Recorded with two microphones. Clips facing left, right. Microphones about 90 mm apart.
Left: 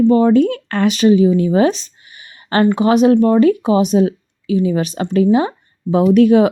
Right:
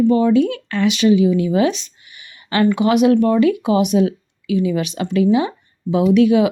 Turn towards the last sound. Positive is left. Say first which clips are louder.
# left 3 dB
turn(degrees=45)  # may be behind; listen again after turning